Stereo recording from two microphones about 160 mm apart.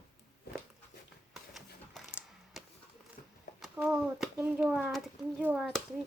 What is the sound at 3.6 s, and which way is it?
A child's voice, 5° right (ahead or behind).